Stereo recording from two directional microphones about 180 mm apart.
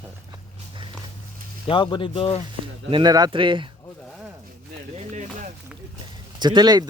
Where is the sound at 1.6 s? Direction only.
25° left (ahead or behind).